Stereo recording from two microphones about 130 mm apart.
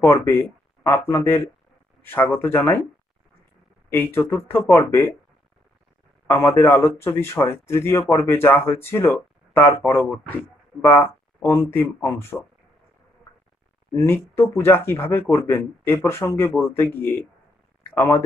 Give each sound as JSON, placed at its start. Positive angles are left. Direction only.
{"t": 0.0, "sound": "speech", "side_deg": 20}
{"t": 3.9, "sound": "speech", "side_deg": 20}
{"t": 6.2, "sound": "speech", "side_deg": 20}
{"t": 13.9, "sound": "speech", "side_deg": 20}